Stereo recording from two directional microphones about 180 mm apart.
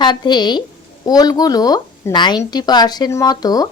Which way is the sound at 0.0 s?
25° left (ahead or behind).